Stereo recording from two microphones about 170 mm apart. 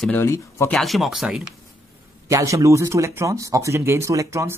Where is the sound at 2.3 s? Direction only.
20° right (ahead or behind).